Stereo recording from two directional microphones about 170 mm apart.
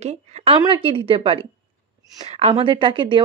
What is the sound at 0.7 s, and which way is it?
Speech, 30° right (ahead or behind).